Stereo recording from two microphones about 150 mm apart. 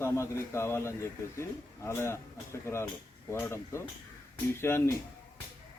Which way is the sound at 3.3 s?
15° left (ahead or behind).